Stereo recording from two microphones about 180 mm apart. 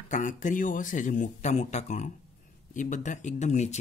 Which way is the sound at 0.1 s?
45° left (ahead or behind).